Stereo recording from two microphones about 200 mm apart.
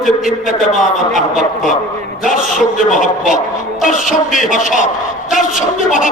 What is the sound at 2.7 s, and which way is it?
A man's voice, 40° left (ahead or behind).